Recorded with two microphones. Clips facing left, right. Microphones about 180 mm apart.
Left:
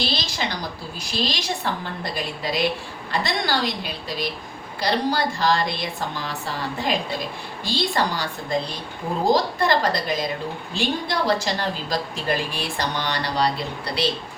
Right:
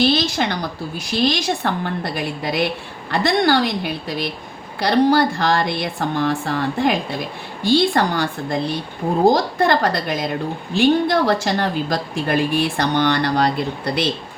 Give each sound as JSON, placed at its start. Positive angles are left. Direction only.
{"t": 0.0, "sound": "a woman's voice", "side_deg": -55}